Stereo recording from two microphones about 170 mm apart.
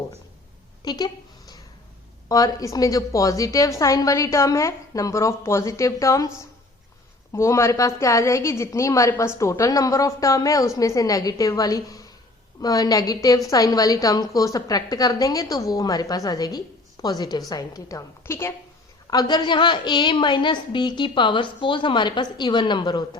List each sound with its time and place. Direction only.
0.9 s a sound: 25° left (ahead or behind)
2.3 s a woman's voice: 20° left (ahead or behind)
7.3 s a woman's voice: 15° left (ahead or behind)